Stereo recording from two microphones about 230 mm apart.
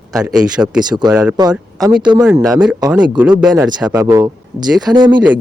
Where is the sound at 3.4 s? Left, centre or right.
Centre.